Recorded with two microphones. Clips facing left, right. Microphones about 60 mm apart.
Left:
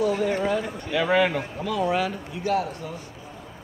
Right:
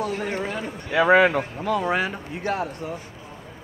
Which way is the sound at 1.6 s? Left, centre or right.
Right.